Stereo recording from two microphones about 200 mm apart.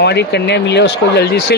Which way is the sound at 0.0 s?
55° left (ahead or behind).